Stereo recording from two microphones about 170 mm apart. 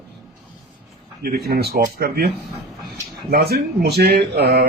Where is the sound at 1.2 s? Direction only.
65° right (ahead or behind).